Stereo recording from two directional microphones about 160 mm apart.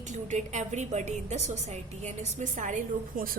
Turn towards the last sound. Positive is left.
turn(degrees=-60)  # may be behind; listen again after turning